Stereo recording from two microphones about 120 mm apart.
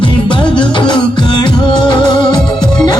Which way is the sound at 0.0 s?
40° left (ahead or behind).